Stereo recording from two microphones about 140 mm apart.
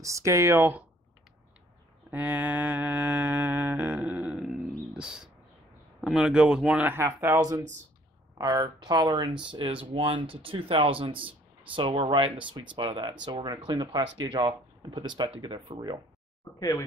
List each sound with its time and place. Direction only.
0.0 s speech: 20° right (ahead or behind)
2.0 s music: 10° right (ahead or behind)
4.0 s grunt: 5° right (ahead or behind)
5.9 s music: centre (ahead or behind); by 7.6 s 25° right (ahead or behind)
8.4 s speech: 30° right (ahead or behind)
16.5 s speech: 25° left (ahead or behind)